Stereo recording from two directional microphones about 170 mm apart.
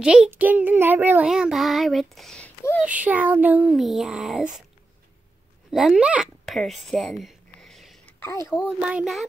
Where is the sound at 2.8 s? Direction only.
10° right (ahead or behind).